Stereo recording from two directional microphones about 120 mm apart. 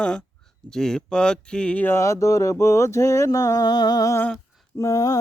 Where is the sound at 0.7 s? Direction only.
5° left (ahead or behind).